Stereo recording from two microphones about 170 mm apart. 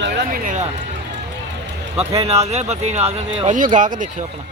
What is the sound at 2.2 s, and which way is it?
Speech, 40° right (ahead or behind).